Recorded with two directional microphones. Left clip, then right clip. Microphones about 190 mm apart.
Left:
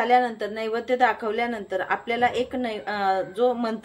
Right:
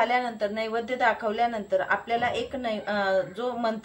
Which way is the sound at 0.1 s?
45° left (ahead or behind).